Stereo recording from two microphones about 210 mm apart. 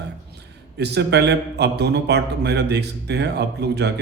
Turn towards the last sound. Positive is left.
turn(degrees=-55)  # may be behind; listen again after turning